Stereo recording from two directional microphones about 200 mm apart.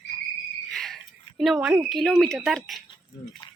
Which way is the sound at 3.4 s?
20° left (ahead or behind).